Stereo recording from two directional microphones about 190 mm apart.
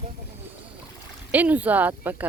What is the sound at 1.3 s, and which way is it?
Speech, 10° right (ahead or behind).